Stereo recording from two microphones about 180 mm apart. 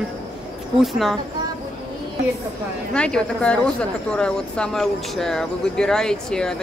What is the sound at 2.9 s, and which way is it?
Speech, 5° left (ahead or behind).